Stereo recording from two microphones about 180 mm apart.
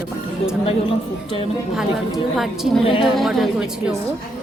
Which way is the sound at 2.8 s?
30° left (ahead or behind).